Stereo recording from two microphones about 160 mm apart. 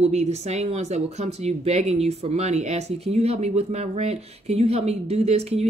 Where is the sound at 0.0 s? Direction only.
40° right (ahead or behind).